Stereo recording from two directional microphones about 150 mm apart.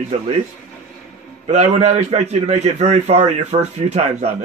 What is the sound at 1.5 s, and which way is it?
A man's voice, 50° right (ahead or behind).